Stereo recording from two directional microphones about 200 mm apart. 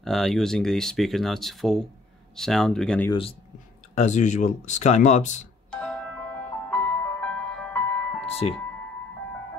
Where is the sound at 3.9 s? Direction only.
35° left (ahead or behind).